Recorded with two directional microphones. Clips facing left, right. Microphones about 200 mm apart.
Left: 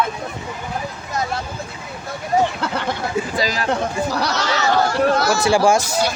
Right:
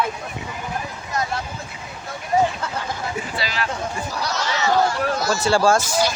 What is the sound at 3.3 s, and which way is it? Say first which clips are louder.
Speech: left 4 dB; 40° left (ahead or behind).